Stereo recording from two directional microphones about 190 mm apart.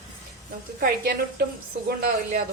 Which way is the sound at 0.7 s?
55° right (ahead or behind).